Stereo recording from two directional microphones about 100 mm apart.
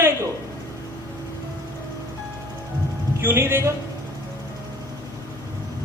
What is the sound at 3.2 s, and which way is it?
Speech, 25° right (ahead or behind).